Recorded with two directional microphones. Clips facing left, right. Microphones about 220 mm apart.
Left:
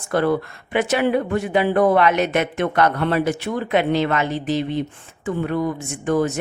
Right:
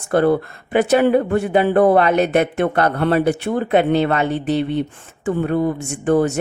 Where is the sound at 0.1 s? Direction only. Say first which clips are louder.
Right 4 dB; 50° right (ahead or behind).